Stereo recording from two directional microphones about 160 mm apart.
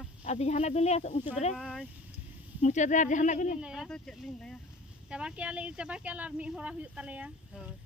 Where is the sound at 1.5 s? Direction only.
Centre (ahead or behind).